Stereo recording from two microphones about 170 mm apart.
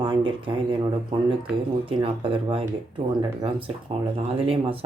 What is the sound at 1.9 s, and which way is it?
Speech, 35° right (ahead or behind).